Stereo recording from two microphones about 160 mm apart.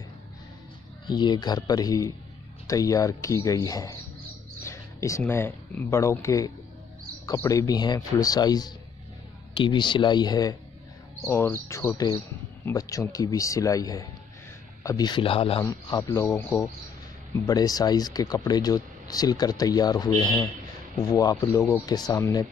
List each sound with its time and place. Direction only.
1.0 s speech: 30° left (ahead or behind)
15.6 s speech: 20° left (ahead or behind)